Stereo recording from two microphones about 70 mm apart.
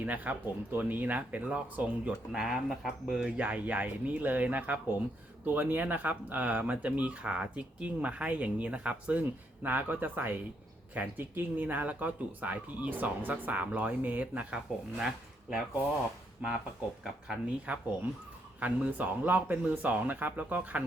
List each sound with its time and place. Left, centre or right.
0.0 s speech: right
2.4 s speech: centre
17.7 s speech: centre